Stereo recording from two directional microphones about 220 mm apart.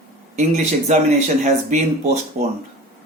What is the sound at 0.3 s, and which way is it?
Speech, 30° right (ahead or behind).